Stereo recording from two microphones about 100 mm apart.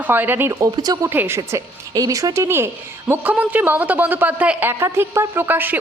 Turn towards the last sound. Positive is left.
turn(degrees=-20)  # may be behind; listen again after turning